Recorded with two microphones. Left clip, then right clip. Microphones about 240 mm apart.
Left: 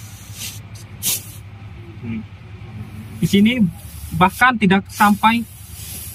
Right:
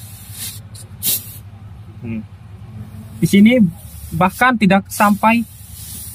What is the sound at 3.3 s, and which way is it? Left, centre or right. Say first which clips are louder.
Speech: right 4 dB; right.